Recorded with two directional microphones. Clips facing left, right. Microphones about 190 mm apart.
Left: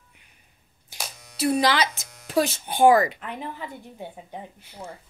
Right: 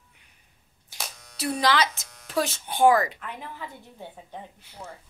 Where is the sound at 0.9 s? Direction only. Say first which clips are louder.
Left 3 dB; 5° left (ahead or behind).